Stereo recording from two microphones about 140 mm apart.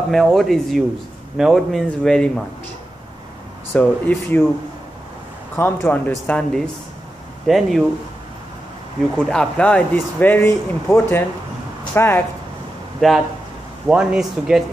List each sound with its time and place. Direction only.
0.1 s speech: centre (ahead or behind)
3.7 s speech: 15° left (ahead or behind)
5.6 s speech: 15° left (ahead or behind)
9.2 s speech: 5° left (ahead or behind)
13.0 s speech: centre (ahead or behind)